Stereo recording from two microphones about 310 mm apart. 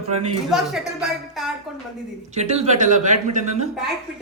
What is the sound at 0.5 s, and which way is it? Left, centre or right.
Speech, centre.